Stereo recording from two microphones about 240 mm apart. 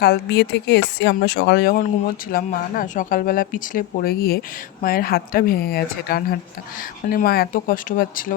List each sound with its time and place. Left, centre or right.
0.0 s speech: left